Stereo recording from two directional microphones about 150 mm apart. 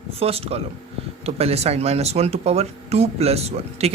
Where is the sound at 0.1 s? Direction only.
40° right (ahead or behind).